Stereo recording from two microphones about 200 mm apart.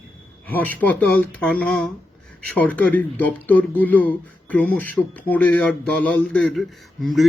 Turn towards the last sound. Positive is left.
turn(degrees=0)  # may be behind; listen again after turning